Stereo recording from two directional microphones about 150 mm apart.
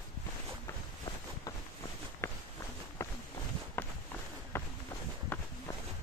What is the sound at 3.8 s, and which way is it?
Walk, 15° left (ahead or behind).